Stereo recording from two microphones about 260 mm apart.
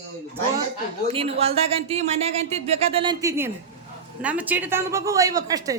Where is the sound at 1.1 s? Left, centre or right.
Right.